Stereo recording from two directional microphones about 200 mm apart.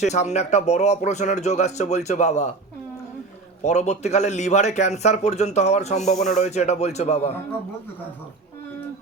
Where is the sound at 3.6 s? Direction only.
35° left (ahead or behind).